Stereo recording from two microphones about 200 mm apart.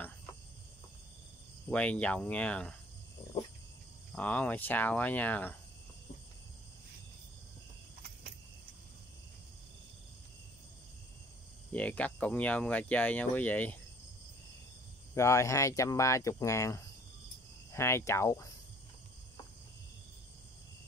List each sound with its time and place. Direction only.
1.7 s speech: 5° left (ahead or behind)
4.1 s speech: 5° left (ahead or behind)
11.7 s speech: 5° left (ahead or behind)
15.1 s speech: 15° left (ahead or behind)